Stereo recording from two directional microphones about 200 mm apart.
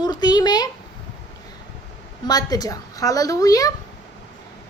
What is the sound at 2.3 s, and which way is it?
A woman's voice, 20° left (ahead or behind).